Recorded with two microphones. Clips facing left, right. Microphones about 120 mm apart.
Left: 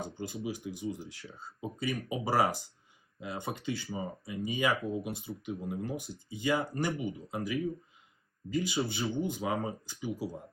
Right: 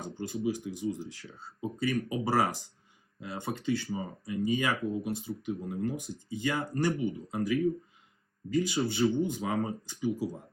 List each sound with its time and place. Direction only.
0.3 s speech: 5° left (ahead or behind)